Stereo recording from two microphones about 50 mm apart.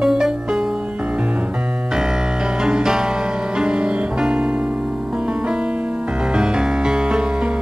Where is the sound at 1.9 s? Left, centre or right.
Centre.